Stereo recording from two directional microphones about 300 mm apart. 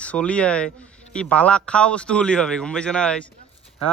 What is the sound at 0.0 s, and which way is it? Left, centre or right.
A man's voice, centre.